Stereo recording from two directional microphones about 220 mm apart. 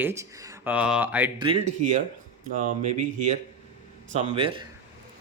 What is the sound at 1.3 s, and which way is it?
Speech, 25° right (ahead or behind).